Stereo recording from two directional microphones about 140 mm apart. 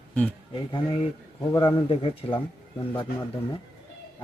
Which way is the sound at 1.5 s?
35° left (ahead or behind).